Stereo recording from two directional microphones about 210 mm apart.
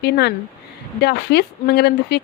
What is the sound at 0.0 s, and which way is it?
Speech, 50° left (ahead or behind).